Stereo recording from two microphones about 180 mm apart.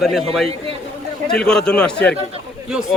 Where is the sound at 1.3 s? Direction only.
5° left (ahead or behind).